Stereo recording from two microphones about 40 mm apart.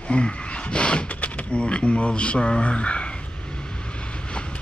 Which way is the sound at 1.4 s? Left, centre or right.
Left.